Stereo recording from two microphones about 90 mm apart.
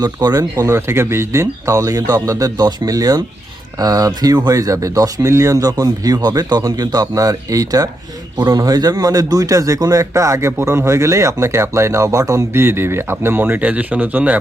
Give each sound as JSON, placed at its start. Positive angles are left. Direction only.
{"t": 0.0, "sound": "speech", "side_deg": -45}